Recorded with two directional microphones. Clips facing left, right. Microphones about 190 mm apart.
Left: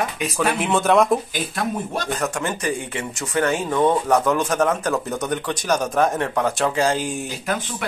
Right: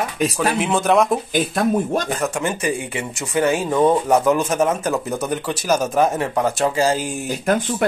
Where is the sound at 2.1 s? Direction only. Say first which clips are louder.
Right 2 dB; 5° right (ahead or behind).